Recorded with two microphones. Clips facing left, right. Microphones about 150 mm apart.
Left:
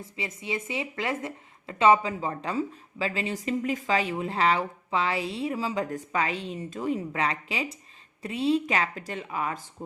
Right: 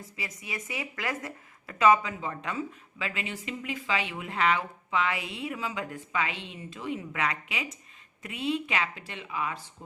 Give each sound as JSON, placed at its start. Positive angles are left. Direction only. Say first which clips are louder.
{"t": 0.0, "sound": "speech", "louder": "left 5 dB", "side_deg": 25}